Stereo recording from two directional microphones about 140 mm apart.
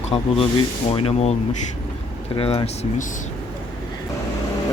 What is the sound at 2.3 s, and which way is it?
Speech, 45° left (ahead or behind).